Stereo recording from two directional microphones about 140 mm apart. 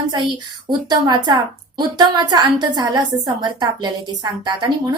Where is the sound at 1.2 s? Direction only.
30° right (ahead or behind).